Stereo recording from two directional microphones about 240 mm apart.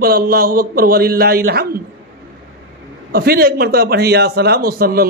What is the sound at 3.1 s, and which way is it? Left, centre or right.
A man's voice, right.